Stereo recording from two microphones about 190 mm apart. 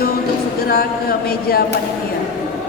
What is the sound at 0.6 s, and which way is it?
Speech, 50° left (ahead or behind).